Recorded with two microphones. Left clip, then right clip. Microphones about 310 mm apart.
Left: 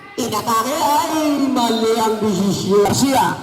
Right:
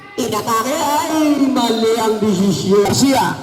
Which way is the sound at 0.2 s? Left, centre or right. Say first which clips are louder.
Right 1 dB; left.